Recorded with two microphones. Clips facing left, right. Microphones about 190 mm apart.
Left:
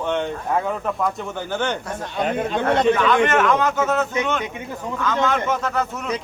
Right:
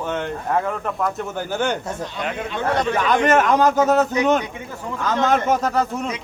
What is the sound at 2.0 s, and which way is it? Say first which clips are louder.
Speech: left 4 dB; 50° left (ahead or behind).